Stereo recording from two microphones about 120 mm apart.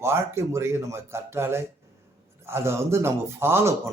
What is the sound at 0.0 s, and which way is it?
Speech, 20° right (ahead or behind).